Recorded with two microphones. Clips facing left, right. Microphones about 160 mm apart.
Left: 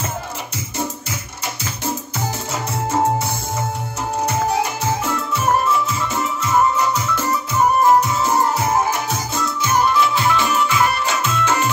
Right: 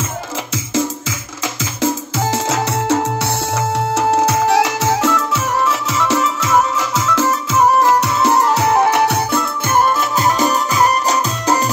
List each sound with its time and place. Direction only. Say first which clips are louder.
1.8 s music: right 8 dB; 90° right; by 11.7 s 40° right (ahead or behind)